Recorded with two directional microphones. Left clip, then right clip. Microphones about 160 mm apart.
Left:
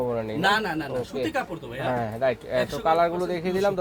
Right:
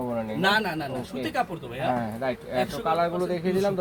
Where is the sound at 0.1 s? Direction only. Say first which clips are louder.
Right 3 dB; 45° left (ahead or behind).